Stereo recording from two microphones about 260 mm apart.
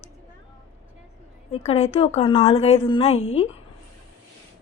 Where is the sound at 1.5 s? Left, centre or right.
Left.